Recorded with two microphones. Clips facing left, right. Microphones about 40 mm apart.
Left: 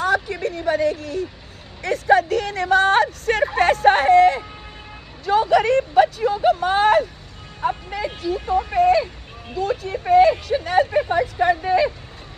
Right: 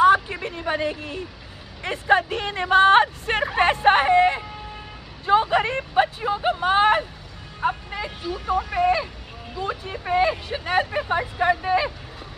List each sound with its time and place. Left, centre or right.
0.0 s a woman's voice: right
7.6 s music: centre
8.2 s speech: right
10.9 s speech: centre
11.1 s speech: centre